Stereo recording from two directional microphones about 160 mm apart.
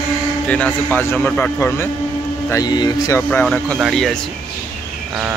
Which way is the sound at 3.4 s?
Centre (ahead or behind).